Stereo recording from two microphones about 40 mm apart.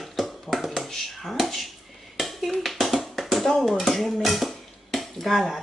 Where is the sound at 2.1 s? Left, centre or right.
Centre.